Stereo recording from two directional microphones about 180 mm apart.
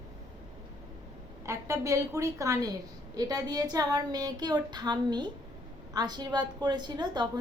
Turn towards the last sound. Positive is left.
turn(degrees=-25)  # may be behind; listen again after turning